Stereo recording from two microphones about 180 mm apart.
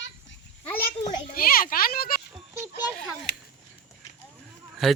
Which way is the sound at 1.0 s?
50° left (ahead or behind).